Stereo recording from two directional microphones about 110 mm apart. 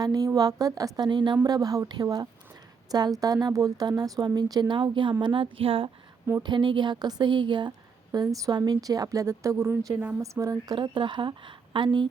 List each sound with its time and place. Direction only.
0.0 s a woman's voice: 35° right (ahead or behind); by 5.9 s 55° right (ahead or behind)
6.4 s a woman's voice: 45° right (ahead or behind)
10.8 s speech: 50° right (ahead or behind)